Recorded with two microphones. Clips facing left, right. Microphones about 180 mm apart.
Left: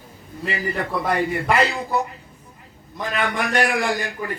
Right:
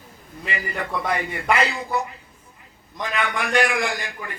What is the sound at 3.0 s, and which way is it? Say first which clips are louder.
A man's voice: left 2 dB; 40° left (ahead or behind).